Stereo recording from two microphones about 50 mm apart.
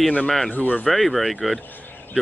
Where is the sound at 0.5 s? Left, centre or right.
Left.